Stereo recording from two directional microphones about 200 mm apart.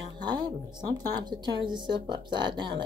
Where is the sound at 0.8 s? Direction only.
20° right (ahead or behind).